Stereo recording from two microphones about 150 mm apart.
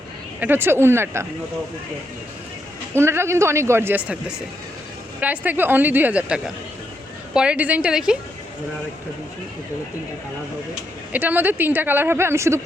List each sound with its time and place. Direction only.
0.3 s a woman's voice: 15° right (ahead or behind)
2.9 s a woman's voice: 15° right (ahead or behind)
5.2 s a woman's voice: 10° right (ahead or behind)
11.1 s a woman's voice: 10° right (ahead or behind)